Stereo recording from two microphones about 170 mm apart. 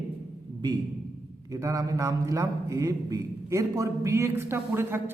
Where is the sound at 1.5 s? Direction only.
20° right (ahead or behind).